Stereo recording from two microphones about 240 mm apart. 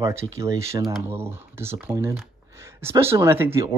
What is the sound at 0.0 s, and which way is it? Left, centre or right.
Speech, centre.